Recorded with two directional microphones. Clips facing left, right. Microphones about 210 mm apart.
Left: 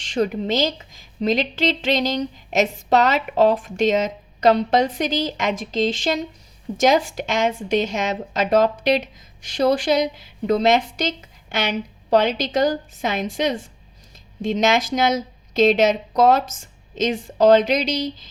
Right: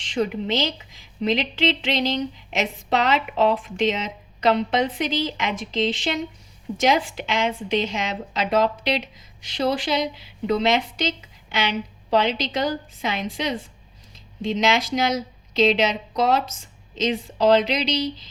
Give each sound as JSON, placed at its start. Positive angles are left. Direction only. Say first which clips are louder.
{"t": 0.0, "sound": "a woman's voice", "louder": "left 2 dB", "side_deg": 45}